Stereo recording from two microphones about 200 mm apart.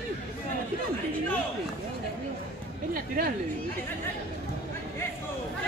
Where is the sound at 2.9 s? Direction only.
45° right (ahead or behind).